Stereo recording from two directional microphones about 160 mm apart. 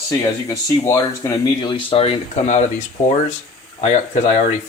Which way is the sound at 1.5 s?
30° left (ahead or behind).